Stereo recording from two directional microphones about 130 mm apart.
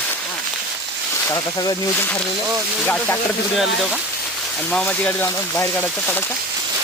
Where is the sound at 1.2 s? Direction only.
30° left (ahead or behind).